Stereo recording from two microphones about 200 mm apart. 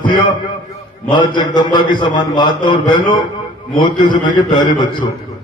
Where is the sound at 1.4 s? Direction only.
20° left (ahead or behind).